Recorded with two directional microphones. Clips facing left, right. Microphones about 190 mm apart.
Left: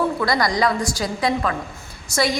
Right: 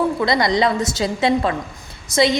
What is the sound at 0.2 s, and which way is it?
A woman's voice, 20° right (ahead or behind).